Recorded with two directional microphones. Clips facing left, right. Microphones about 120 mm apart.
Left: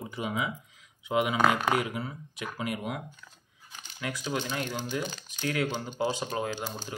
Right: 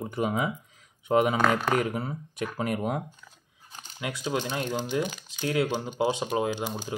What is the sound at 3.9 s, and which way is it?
Speech, 25° right (ahead or behind).